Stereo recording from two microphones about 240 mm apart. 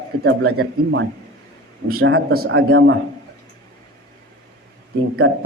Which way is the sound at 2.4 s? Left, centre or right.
Right.